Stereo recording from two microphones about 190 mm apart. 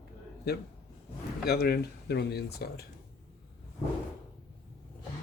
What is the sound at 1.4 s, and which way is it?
Speech, 60° left (ahead or behind).